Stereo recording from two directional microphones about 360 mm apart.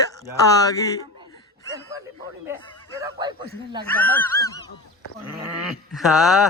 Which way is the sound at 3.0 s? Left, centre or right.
Centre.